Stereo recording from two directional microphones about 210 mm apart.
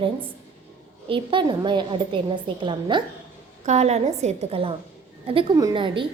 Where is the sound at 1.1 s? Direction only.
25° right (ahead or behind).